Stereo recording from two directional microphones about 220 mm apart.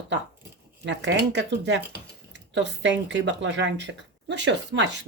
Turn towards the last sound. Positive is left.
turn(degrees=-55)  # may be behind; listen again after turning